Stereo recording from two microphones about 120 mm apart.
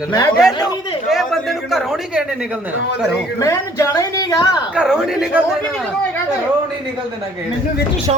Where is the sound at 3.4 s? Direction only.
25° left (ahead or behind).